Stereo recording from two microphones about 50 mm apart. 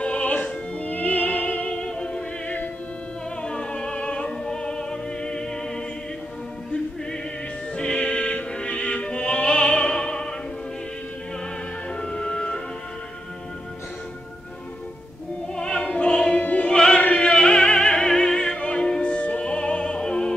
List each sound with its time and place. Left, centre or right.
0.0 s opera: left
3.4 s opera: centre
7.7 s music: centre
12.0 s music: centre
15.5 s opera: centre
16.7 s chant: centre
17.0 s opera: left